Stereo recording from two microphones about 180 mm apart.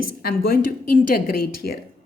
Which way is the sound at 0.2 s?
55° left (ahead or behind).